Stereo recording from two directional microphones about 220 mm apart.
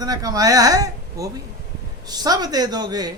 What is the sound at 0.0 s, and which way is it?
Speech, 15° right (ahead or behind).